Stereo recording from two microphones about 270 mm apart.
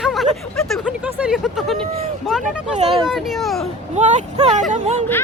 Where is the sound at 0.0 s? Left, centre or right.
Centre.